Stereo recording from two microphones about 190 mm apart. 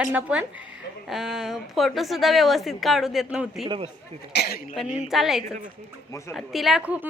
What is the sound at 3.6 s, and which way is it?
Speech, 25° right (ahead or behind).